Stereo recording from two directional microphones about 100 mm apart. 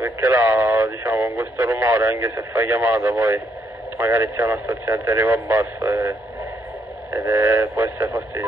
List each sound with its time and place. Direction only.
0.0 s speech: 25° right (ahead or behind)